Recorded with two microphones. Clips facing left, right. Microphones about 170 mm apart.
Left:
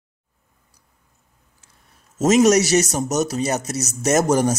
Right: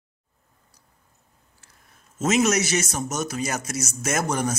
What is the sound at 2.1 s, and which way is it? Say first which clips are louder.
Speech: left 7 dB; 40° left (ahead or behind).